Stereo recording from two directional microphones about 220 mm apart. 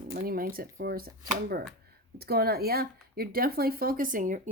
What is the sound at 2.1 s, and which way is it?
Speech, 45° right (ahead or behind).